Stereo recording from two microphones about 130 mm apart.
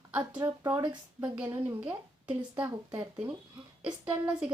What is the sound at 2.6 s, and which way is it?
Speech, 35° right (ahead or behind).